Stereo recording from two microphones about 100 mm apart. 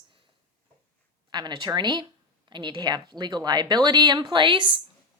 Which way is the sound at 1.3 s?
45° right (ahead or behind).